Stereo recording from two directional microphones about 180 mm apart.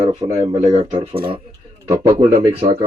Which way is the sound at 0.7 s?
25° right (ahead or behind).